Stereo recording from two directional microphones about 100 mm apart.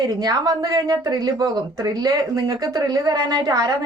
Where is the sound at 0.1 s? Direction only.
45° right (ahead or behind).